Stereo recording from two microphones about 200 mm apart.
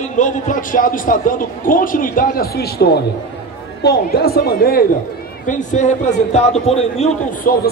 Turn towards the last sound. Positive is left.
turn(degrees=45)  # may be behind; listen again after turning